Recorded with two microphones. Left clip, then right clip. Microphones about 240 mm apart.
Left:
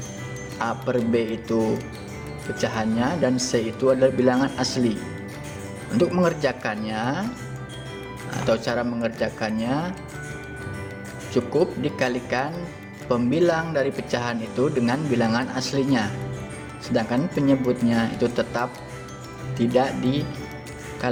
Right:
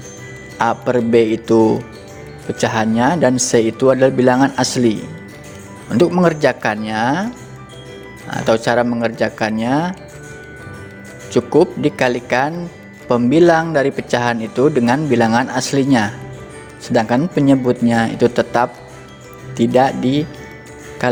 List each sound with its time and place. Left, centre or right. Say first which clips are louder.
0.6 s speech: right 9 dB; right
8.3 s speech: right 8 dB; right
11.3 s speech: right 9 dB; right